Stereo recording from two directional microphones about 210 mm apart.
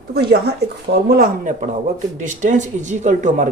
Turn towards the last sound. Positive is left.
turn(degrees=-35)  # may be behind; listen again after turning